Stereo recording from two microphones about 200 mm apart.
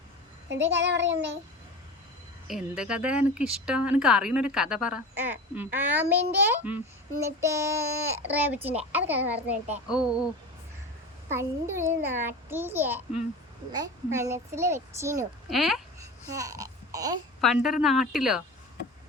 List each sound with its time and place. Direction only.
0.7 s child singing: 60° right (ahead or behind)
2.5 s a child's voice: 5° right (ahead or behind)
11.3 s a child's voice: 10° right (ahead or behind)
15.4 s speech: centre (ahead or behind)
16.0 s babbling: 15° right (ahead or behind)
17.4 s speech: centre (ahead or behind)